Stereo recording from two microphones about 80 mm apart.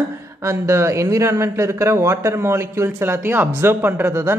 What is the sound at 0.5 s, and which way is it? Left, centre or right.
Speech, right.